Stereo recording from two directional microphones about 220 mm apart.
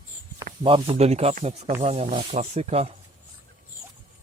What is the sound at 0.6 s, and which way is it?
Speech, 25° right (ahead or behind).